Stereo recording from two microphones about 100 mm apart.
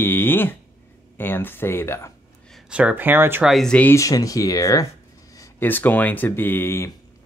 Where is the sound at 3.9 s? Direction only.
35° left (ahead or behind).